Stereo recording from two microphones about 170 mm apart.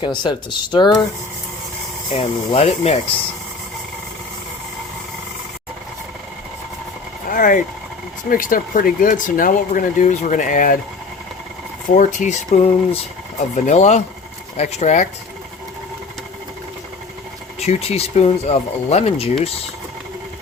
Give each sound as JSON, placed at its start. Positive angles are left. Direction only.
{"t": 0.0, "sound": "speech", "side_deg": 25}
{"t": 2.1, "sound": "speech", "side_deg": 35}
{"t": 7.3, "sound": "speech", "side_deg": 50}
{"t": 11.9, "sound": "speech", "side_deg": 45}
{"t": 17.6, "sound": "speech", "side_deg": 40}